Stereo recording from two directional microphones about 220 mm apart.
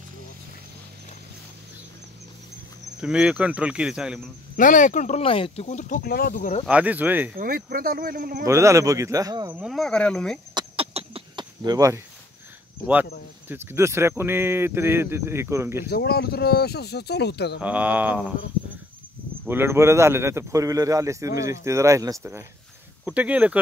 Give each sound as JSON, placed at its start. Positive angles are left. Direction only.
{"t": 3.0, "sound": "speech", "side_deg": -5}
{"t": 4.6, "sound": "speech", "side_deg": 35}
{"t": 6.6, "sound": "speech", "side_deg": -5}
{"t": 7.3, "sound": "speech", "side_deg": -40}
{"t": 8.5, "sound": "speech", "side_deg": -15}
{"t": 9.5, "sound": "speech", "side_deg": -5}
{"t": 10.5, "sound": "a sound", "side_deg": -25}
{"t": 13.5, "sound": "speech", "side_deg": -10}
{"t": 15.9, "sound": "speech", "side_deg": 45}
{"t": 17.6, "sound": "speech", "side_deg": -5}
{"t": 19.4, "sound": "speech", "side_deg": -10}